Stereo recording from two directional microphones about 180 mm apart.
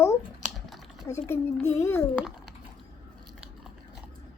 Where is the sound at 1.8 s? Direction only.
15° left (ahead or behind).